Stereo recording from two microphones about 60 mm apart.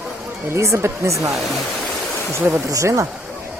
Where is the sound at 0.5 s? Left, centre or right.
Right.